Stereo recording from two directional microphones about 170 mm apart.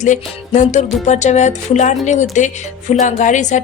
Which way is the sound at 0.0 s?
45° left (ahead or behind).